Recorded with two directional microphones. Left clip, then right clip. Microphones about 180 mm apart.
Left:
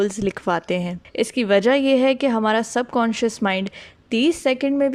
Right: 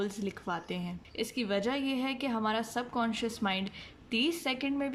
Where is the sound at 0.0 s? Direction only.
40° left (ahead or behind).